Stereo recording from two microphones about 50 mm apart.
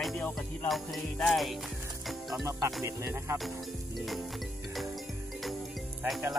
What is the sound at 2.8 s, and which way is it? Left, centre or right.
Music, right.